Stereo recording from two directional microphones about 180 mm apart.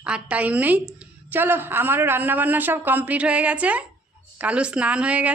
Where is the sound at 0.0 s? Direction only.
5° right (ahead or behind).